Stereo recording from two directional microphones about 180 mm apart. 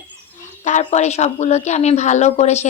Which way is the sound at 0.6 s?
40° left (ahead or behind).